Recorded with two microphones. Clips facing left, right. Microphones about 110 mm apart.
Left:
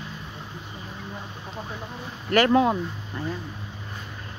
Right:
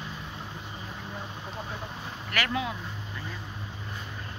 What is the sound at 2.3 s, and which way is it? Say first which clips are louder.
Speech: left 12 dB; 40° left (ahead or behind).